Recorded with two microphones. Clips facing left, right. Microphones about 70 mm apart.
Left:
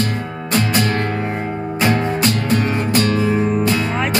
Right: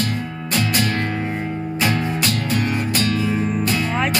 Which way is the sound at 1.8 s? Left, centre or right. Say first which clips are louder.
Left 4 dB; left.